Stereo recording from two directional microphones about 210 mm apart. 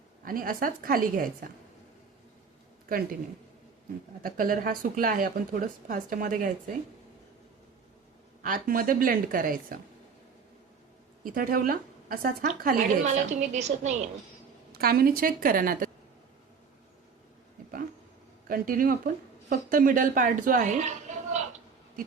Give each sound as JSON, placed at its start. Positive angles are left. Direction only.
{"t": 0.3, "sound": "speech", "side_deg": -40}
{"t": 2.9, "sound": "a woman's voice", "side_deg": -40}
{"t": 4.2, "sound": "speech", "side_deg": -40}
{"t": 8.4, "sound": "a woman's voice", "side_deg": -40}
{"t": 11.2, "sound": "a woman's voice", "side_deg": -40}
{"t": 14.7, "sound": "speech", "side_deg": -45}
{"t": 18.4, "sound": "a woman's voice", "side_deg": -40}